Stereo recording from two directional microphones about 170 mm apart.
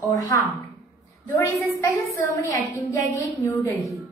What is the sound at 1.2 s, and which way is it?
A woman's voice, 15° left (ahead or behind).